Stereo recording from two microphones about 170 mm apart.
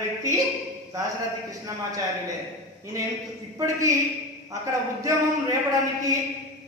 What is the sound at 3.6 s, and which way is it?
A man's voice, 20° right (ahead or behind).